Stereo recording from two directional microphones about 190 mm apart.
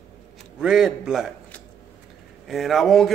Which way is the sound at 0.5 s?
5° right (ahead or behind).